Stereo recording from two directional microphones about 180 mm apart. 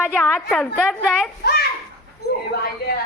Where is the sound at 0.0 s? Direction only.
5° left (ahead or behind).